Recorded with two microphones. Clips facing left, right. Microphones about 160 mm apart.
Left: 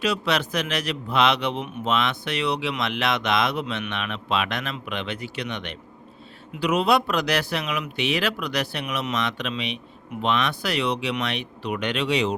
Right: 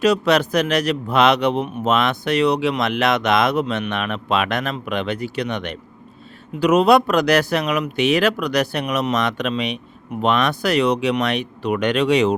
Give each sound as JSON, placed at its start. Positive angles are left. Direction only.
{"t": 0.0, "sound": "speech", "side_deg": -45}